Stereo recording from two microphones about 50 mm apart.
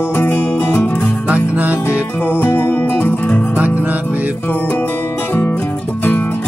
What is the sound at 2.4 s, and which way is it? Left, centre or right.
Music, left.